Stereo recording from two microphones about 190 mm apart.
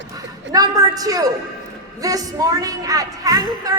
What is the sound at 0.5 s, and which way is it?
A woman's voice, 20° right (ahead or behind).